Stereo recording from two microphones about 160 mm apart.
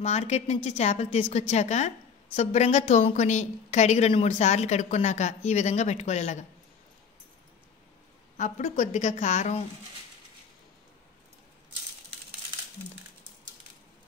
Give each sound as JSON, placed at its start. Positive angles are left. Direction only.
{"t": 0.0, "sound": "a woman's voice", "side_deg": 45}
{"t": 8.4, "sound": "a woman's voice", "side_deg": 50}